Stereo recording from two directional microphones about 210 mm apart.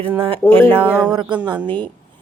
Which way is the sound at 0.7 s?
5° right (ahead or behind).